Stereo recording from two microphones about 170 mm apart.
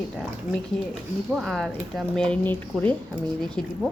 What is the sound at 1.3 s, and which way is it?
Speech, centre (ahead or behind).